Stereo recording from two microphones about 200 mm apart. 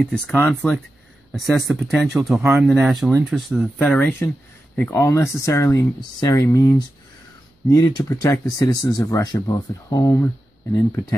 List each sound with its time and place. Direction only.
0.0 s speech: 5° left (ahead or behind)